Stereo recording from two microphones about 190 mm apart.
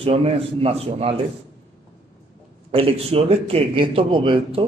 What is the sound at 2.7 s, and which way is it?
Speech, 30° right (ahead or behind).